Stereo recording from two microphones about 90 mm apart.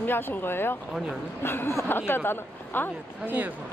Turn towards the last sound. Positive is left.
turn(degrees=-15)  # may be behind; listen again after turning